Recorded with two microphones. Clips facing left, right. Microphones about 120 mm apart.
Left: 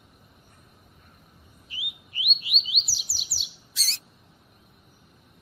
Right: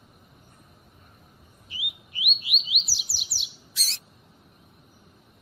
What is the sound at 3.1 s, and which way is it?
Bird, centre (ahead or behind).